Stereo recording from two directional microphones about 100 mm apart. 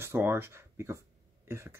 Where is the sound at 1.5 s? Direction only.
25° right (ahead or behind).